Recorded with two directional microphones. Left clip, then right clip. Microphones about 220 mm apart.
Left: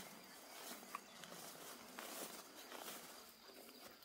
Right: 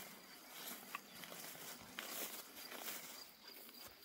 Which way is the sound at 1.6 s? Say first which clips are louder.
Right 2 dB; centre (ahead or behind).